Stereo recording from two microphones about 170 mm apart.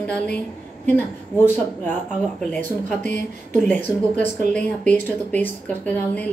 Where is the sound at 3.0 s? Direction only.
50° right (ahead or behind).